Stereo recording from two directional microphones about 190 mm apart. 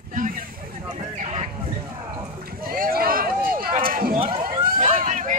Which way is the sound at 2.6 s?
50° right (ahead or behind).